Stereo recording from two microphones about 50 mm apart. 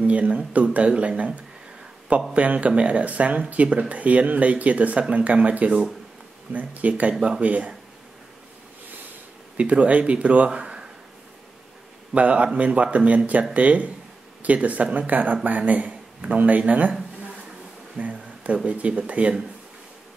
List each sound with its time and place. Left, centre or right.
0.0 s speech: right
9.6 s speech: right
12.1 s speech: right
17.9 s a sound: right
18.7 s speech: right